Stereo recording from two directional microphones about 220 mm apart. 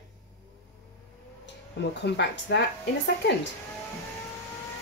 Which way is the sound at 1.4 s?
50° left (ahead or behind).